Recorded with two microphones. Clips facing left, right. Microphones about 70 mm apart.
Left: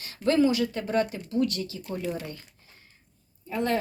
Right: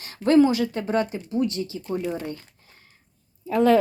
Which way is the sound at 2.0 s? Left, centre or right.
Centre.